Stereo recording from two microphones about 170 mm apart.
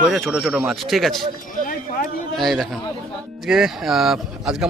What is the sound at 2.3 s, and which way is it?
Speech, centre (ahead or behind).